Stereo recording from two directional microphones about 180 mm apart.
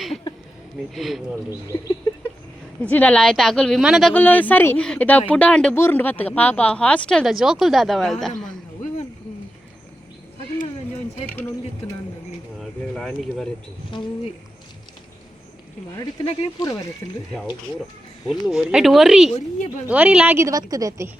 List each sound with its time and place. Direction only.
0.9 s speech: centre (ahead or behind)
2.9 s speech: 5° left (ahead or behind)
4.1 s speech: 10° left (ahead or behind)
11.3 s speech: 10° left (ahead or behind)
13.9 s speech: 25° left (ahead or behind)
16.1 s speech: 20° left (ahead or behind)
18.3 s a woman's voice: centre (ahead or behind); by 21.1 s 20° right (ahead or behind)